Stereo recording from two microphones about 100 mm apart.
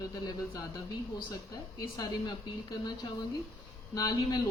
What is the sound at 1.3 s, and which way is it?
Speech, 40° left (ahead or behind).